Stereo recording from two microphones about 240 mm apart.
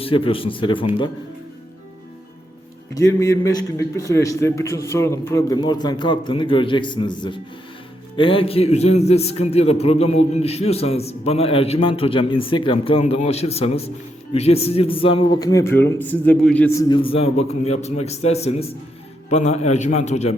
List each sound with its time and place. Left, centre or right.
0.0 s a man's voice: left
2.9 s a man's voice: centre; by 20.3 s left